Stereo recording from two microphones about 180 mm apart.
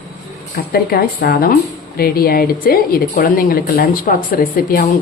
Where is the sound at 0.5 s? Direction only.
55° left (ahead or behind).